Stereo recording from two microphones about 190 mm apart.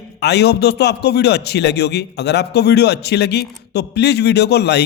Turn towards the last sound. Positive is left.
turn(degrees=60)  # may be behind; listen again after turning